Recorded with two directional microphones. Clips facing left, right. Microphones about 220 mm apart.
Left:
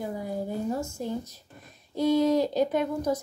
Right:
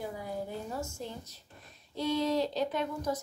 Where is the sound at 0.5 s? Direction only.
45° left (ahead or behind).